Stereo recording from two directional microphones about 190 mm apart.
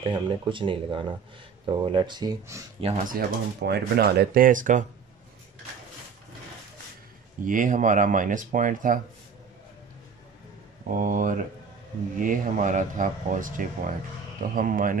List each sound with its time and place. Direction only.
0.0 s speech: 25° right (ahead or behind)
2.8 s speech: 45° right (ahead or behind)
7.4 s speech: 45° right (ahead or behind)
10.9 s speech: 45° right (ahead or behind)